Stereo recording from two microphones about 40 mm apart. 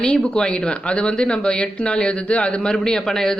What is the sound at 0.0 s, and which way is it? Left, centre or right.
A man's voice, left.